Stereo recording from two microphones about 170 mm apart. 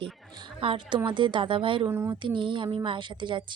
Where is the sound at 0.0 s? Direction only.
30° right (ahead or behind).